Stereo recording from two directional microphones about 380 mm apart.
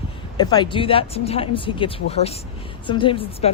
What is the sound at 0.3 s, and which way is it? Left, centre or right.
Speech, centre.